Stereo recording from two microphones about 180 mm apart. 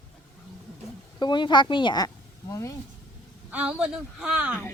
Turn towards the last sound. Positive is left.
turn(degrees=-5)  # may be behind; listen again after turning